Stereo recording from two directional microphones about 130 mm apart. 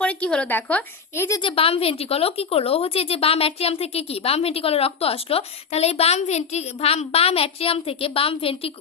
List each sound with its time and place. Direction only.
0.0 s a woman's voice: 10° left (ahead or behind)
1.4 s speech: 45° left (ahead or behind)